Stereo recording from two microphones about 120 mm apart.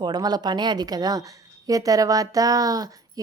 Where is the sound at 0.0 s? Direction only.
35° right (ahead or behind).